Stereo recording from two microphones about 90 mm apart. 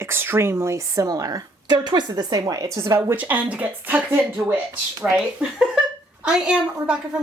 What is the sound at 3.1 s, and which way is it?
A woman's voice, 20° right (ahead or behind).